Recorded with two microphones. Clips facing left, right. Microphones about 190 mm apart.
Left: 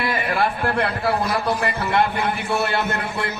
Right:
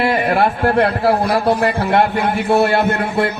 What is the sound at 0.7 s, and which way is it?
A man's voice, 60° right (ahead or behind).